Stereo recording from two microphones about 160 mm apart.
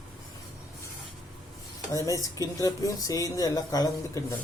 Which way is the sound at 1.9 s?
20° left (ahead or behind).